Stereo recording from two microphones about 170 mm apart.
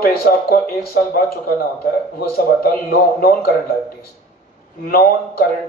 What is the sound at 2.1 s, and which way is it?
Speech, 65° left (ahead or behind).